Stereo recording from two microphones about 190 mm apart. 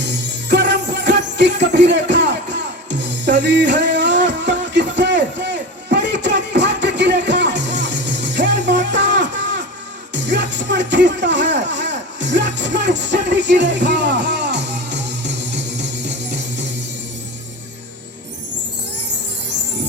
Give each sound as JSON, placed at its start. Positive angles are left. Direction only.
{"t": 0.0, "sound": "music", "side_deg": -65}